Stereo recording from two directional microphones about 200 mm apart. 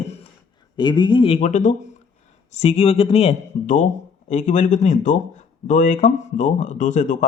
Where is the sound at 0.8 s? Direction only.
20° left (ahead or behind).